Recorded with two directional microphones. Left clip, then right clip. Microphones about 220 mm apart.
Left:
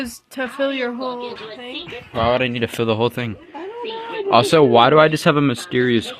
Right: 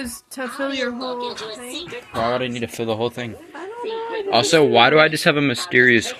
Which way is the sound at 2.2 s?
40° left (ahead or behind).